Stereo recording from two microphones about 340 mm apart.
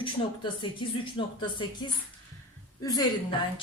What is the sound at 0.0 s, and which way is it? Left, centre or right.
Speech, centre.